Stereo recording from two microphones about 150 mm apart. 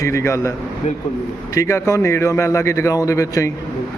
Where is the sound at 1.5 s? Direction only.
20° left (ahead or behind).